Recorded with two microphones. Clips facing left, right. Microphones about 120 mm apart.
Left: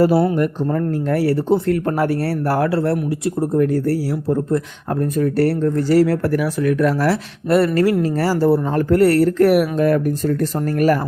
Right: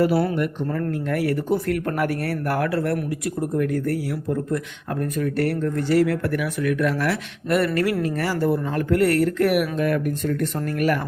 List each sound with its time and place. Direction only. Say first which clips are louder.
0.3 s speech: left 5 dB; 35° left (ahead or behind)